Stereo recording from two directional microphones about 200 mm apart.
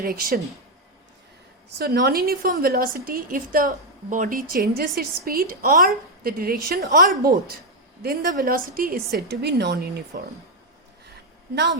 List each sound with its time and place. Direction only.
0.0 s a woman's voice: 45° right (ahead or behind)
1.8 s a woman's voice: 50° right (ahead or behind)
9.3 s speech: 55° right (ahead or behind)
11.5 s speech: 60° right (ahead or behind)